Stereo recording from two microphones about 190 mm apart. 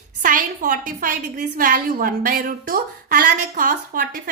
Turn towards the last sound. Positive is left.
turn(degrees=-45)  # may be behind; listen again after turning